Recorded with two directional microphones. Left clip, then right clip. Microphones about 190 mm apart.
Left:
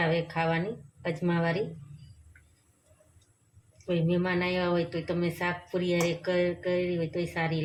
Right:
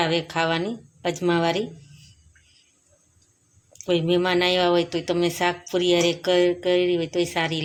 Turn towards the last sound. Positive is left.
turn(degrees=-50)  # may be behind; listen again after turning